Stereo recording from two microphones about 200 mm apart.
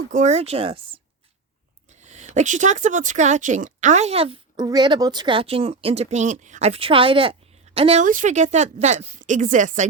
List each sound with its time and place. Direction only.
0.1 s a woman's voice: 35° right (ahead or behind)
1.9 s a woman's voice: 35° right (ahead or behind)
8.0 s a woman's voice: 40° right (ahead or behind)